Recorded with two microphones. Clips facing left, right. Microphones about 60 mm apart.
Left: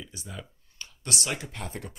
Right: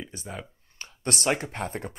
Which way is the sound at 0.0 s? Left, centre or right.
Right.